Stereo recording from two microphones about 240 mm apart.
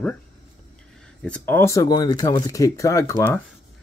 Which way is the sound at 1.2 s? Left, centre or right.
Centre.